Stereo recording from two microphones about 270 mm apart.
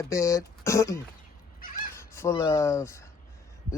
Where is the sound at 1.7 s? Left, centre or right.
Left.